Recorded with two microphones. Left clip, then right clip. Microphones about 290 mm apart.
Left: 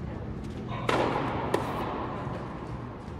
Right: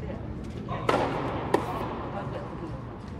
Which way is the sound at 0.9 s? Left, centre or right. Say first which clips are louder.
Even; centre.